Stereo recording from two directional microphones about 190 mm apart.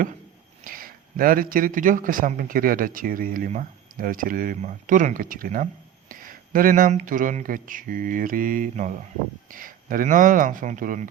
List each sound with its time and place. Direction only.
0.6 s a man's voice: 45° right (ahead or behind)